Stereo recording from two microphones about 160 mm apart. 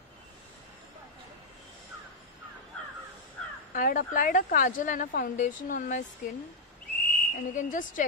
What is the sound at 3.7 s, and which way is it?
A woman's voice, 55° left (ahead or behind).